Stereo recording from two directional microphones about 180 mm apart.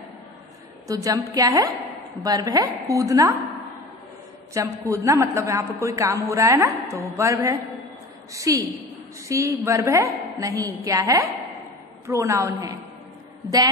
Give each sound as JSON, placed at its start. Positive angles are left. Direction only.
{"t": 0.8, "sound": "a woman's voice", "side_deg": -20}
{"t": 4.6, "sound": "a man's voice", "side_deg": -15}